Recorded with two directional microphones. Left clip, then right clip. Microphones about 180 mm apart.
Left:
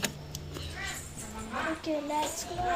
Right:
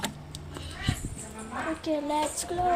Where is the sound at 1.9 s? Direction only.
15° right (ahead or behind).